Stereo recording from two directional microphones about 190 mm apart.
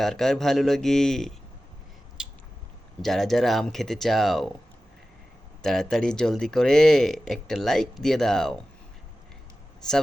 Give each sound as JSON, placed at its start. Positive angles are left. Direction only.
{"t": 0.0, "sound": "speech", "side_deg": 0}
{"t": 2.2, "sound": "biting", "side_deg": -5}
{"t": 3.0, "sound": "speech", "side_deg": 0}
{"t": 5.6, "sound": "speech", "side_deg": 5}